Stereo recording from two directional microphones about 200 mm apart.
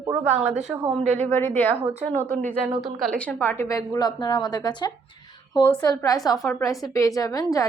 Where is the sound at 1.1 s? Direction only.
10° left (ahead or behind).